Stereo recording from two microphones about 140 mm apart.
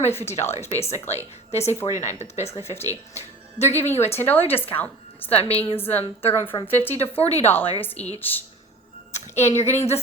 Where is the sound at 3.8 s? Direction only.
50° left (ahead or behind).